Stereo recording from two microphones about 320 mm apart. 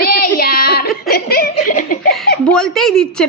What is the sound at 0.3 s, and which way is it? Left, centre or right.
Giggle, left.